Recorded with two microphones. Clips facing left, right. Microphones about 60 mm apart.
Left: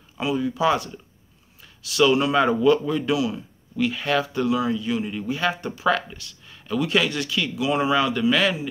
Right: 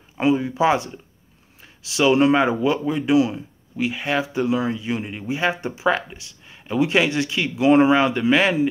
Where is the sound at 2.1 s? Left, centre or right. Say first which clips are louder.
Right 4 dB; right.